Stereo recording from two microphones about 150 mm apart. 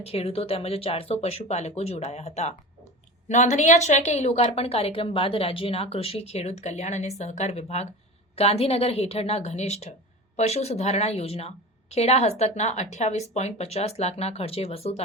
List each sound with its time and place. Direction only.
0.0 s a woman's voice: 40° left (ahead or behind)